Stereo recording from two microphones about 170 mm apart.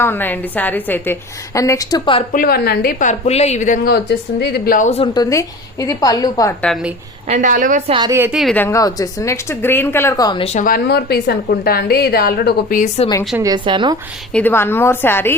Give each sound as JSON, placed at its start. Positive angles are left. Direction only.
{"t": 0.0, "sound": "a woman's voice", "side_deg": 10}
{"t": 2.3, "sound": "a woman's voice", "side_deg": 60}
{"t": 3.1, "sound": "a woman's voice", "side_deg": 40}
{"t": 3.8, "sound": "speech", "side_deg": 70}
{"t": 5.1, "sound": "a woman's voice", "side_deg": 20}
{"t": 7.3, "sound": "a woman's voice", "side_deg": -45}
{"t": 7.9, "sound": "a woman's voice", "side_deg": -30}
{"t": 8.1, "sound": "a woman's voice", "side_deg": -10}
{"t": 8.5, "sound": "a woman's voice", "side_deg": 15}
{"t": 10.4, "sound": "a woman's voice", "side_deg": 40}
{"t": 10.7, "sound": "a woman's voice", "side_deg": 70}
{"t": 13.3, "sound": "a woman's voice", "side_deg": -20}
{"t": 14.3, "sound": "a woman's voice", "side_deg": 10}